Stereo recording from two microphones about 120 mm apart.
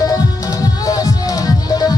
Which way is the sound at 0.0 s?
30° left (ahead or behind).